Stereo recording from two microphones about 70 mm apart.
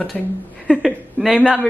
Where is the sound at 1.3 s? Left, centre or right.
Centre.